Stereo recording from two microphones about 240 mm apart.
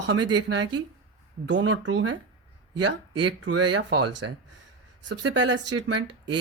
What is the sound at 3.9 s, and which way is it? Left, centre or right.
Speech, right.